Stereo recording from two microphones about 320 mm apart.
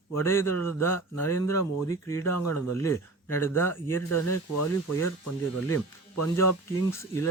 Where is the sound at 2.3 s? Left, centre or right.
Left.